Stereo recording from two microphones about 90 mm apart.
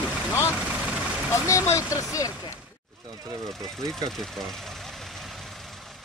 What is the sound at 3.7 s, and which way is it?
Speech, 5° left (ahead or behind).